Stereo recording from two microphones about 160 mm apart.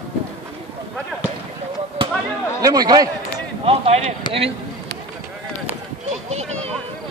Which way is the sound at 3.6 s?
40° right (ahead or behind).